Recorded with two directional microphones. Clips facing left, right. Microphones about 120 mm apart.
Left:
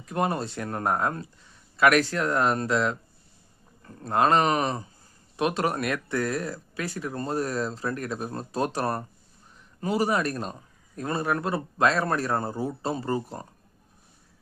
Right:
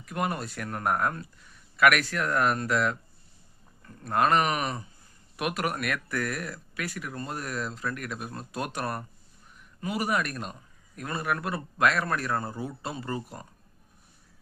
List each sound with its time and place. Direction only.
0.0 s speech: 30° left (ahead or behind)